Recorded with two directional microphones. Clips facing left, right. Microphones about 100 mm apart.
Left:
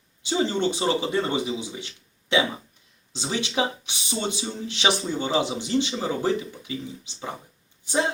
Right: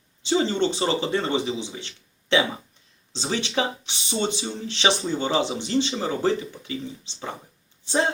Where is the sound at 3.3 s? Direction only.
15° left (ahead or behind).